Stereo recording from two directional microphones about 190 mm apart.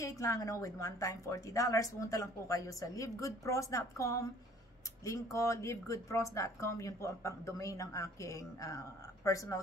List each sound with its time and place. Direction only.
0.0 s speech: 15° left (ahead or behind)